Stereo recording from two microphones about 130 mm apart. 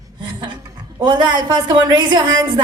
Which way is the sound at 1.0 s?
35° right (ahead or behind).